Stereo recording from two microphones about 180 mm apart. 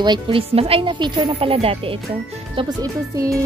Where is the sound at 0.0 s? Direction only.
25° right (ahead or behind).